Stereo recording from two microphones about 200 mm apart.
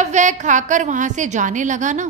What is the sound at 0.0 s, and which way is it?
A woman's voice, 35° right (ahead or behind).